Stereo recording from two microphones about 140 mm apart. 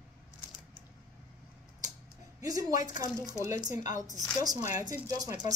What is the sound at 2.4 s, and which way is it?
Speech, 25° right (ahead or behind).